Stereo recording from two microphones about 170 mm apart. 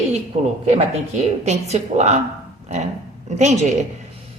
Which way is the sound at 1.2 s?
40° right (ahead or behind).